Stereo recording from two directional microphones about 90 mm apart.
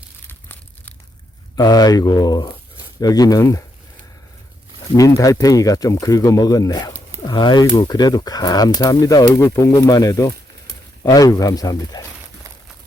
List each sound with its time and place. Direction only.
1.5 s speech: 45° left (ahead or behind)
4.9 s speech: 40° left (ahead or behind)
7.3 s speech: 55° left (ahead or behind)